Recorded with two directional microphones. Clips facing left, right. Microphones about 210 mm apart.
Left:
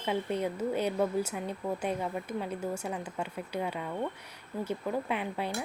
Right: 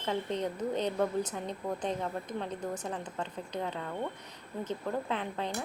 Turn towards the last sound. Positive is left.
turn(degrees=10)  # may be behind; listen again after turning